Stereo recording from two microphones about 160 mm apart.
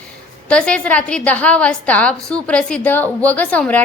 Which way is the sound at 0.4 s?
5° left (ahead or behind).